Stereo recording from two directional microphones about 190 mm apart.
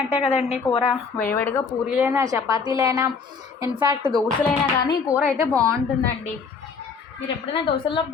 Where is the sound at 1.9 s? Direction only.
10° right (ahead or behind).